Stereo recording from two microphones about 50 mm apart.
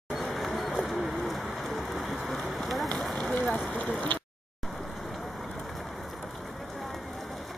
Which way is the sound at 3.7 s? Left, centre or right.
Left.